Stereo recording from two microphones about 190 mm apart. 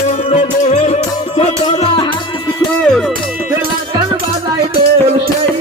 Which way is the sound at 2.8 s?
5° left (ahead or behind).